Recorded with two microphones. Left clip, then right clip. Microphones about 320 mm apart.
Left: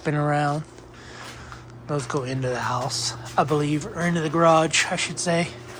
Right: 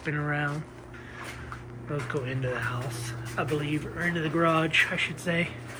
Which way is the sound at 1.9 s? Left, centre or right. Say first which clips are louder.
Left 5 dB; centre.